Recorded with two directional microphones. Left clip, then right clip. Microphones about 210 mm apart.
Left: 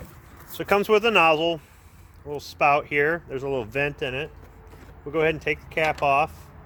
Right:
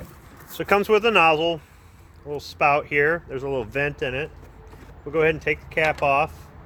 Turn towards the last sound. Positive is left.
turn(degrees=40)  # may be behind; listen again after turning